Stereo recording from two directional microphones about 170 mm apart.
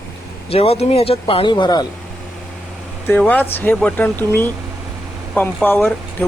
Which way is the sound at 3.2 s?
10° left (ahead or behind).